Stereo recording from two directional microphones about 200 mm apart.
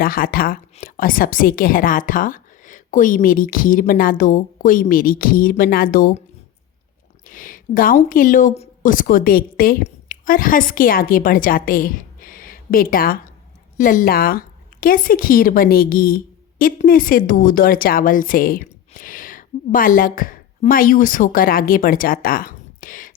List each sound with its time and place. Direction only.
0.0 s a woman's voice: 45° left (ahead or behind)
7.3 s a woman's voice: 40° left (ahead or behind)